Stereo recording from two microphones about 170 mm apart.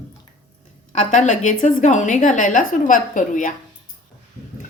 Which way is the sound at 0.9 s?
45° left (ahead or behind).